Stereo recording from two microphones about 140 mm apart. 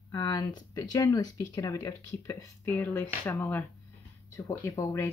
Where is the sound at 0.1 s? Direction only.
30° left (ahead or behind).